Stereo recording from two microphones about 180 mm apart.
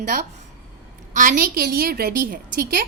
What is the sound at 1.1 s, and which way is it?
A woman's voice, 50° right (ahead or behind).